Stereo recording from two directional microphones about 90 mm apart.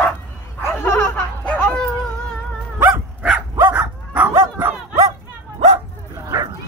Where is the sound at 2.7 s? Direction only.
20° right (ahead or behind).